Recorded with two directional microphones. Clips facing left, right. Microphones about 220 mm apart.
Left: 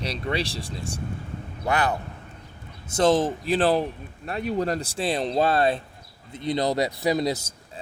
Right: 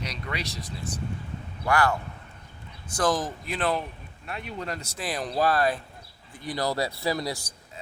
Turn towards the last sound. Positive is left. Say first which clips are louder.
# left 5 dB
turn(degrees=20)  # may be behind; listen again after turning